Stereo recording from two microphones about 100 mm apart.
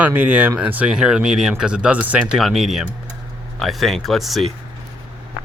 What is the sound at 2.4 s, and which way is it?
Speech, centre (ahead or behind).